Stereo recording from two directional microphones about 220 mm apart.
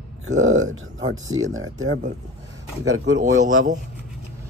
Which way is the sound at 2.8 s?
60° right (ahead or behind).